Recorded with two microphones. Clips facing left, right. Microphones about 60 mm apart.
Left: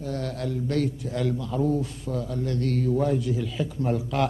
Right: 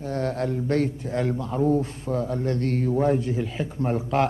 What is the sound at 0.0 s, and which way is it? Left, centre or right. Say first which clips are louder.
A man's voice: right 4 dB; right.